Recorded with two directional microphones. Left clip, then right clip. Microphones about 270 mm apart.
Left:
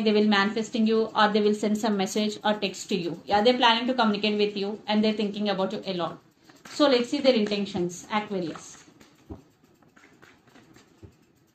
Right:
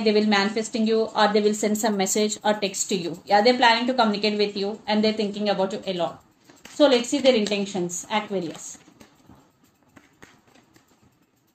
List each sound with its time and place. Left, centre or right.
0.0 s a woman's voice: right